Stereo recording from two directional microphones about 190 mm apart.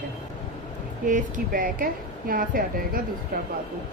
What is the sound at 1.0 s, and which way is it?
Speech, 45° right (ahead or behind).